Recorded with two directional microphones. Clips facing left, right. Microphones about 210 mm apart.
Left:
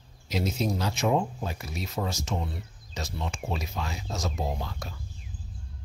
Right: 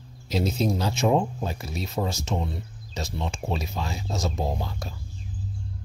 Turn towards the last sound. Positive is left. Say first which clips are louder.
# right 3 dB
turn(degrees=-30)  # may be behind; listen again after turning